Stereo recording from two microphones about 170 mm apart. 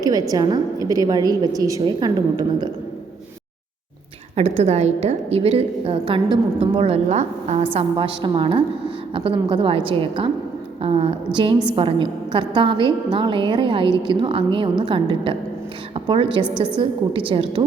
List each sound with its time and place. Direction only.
0.0 s a woman's voice: 20° right (ahead or behind)
4.4 s a woman's voice: 40° right (ahead or behind)